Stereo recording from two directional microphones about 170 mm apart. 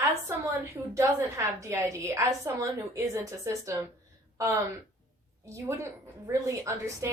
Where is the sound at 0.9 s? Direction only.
15° right (ahead or behind).